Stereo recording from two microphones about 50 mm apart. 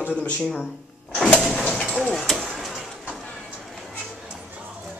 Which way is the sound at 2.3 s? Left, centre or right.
Centre.